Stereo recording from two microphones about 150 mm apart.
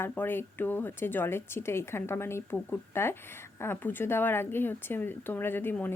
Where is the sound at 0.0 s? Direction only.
15° left (ahead or behind).